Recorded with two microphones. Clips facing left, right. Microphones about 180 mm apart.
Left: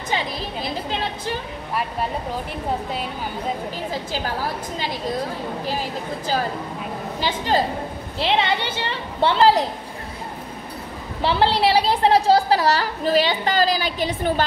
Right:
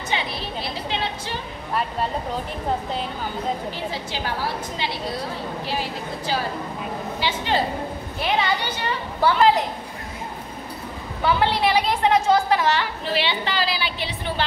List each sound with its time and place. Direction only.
0.1 s a sound: 40° left (ahead or behind)
5.7 s a woman's voice: 45° left (ahead or behind)
8.2 s a woman's voice: 25° left (ahead or behind)
11.2 s a woman's voice: 30° left (ahead or behind)